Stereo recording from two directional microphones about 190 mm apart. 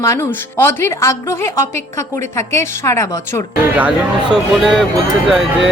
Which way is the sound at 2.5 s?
15° left (ahead or behind).